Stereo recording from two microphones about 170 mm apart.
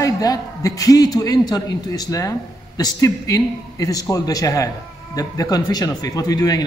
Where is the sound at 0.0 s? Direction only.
20° left (ahead or behind).